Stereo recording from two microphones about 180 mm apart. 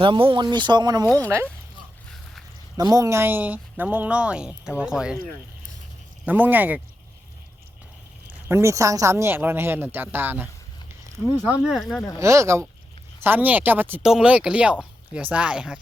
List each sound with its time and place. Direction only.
0.0 s speech: 30° right (ahead or behind)
1.0 s speech: 10° left (ahead or behind)
2.7 s speech: 20° right (ahead or behind); by 5.2 s 5° right (ahead or behind)
6.2 s speech: 10° right (ahead or behind)
8.3 s speech: 15° right (ahead or behind)
12.2 s speech: 15° right (ahead or behind)